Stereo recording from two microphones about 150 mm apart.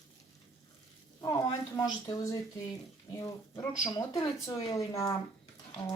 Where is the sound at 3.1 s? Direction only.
20° left (ahead or behind).